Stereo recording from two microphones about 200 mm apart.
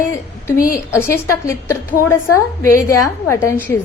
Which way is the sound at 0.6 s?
45° left (ahead or behind).